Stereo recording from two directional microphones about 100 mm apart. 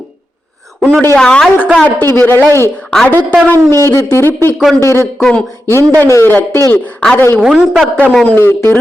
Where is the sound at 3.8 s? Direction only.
30° left (ahead or behind).